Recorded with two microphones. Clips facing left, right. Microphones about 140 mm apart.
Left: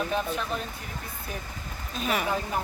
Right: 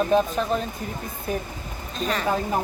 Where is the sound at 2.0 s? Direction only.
10° left (ahead or behind).